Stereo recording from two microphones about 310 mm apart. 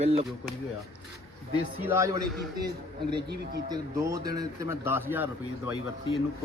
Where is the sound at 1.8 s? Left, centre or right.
Centre.